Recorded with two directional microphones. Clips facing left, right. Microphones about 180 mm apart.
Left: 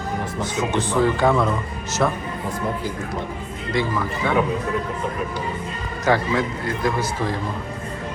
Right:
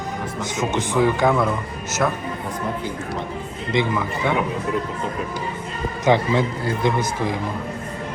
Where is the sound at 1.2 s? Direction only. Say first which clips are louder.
Even; 10° right (ahead or behind).